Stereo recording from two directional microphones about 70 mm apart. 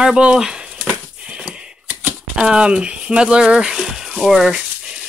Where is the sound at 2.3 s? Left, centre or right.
Centre.